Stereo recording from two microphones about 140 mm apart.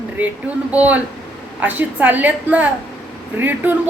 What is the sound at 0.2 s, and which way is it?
A woman's voice, 10° right (ahead or behind).